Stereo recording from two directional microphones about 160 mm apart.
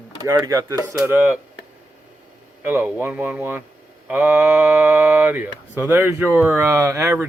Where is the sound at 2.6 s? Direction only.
15° right (ahead or behind).